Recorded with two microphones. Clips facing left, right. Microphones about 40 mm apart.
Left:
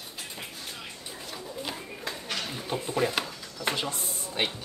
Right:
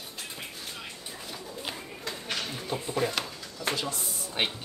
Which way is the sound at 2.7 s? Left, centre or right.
Centre.